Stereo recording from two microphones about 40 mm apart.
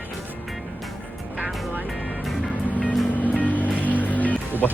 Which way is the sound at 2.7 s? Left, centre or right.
Left.